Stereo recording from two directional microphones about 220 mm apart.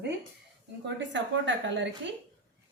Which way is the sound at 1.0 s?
55° right (ahead or behind).